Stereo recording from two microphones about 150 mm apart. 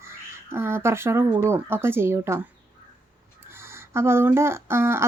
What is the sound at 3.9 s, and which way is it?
Speech, 15° right (ahead or behind).